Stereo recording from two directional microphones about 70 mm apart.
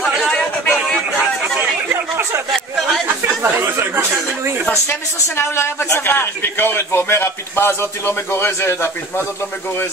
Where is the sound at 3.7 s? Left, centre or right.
Right.